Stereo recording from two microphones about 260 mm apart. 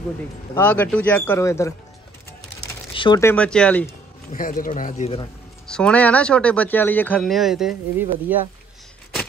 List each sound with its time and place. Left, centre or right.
0.6 s speech: centre
2.9 s speech: centre
4.3 s speech: left
5.7 s speech: centre